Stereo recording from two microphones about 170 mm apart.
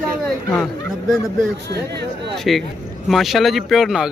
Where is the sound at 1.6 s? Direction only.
75° right (ahead or behind).